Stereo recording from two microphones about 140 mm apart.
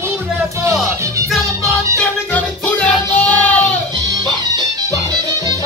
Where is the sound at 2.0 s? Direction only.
10° left (ahead or behind).